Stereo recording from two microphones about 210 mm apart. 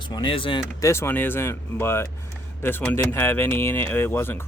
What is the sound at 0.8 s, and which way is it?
Speech, 15° left (ahead or behind).